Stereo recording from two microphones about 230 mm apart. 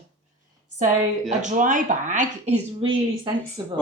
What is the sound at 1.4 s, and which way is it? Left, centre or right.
Speech, right.